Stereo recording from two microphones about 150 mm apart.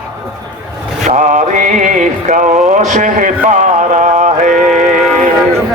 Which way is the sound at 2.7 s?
55° right (ahead or behind).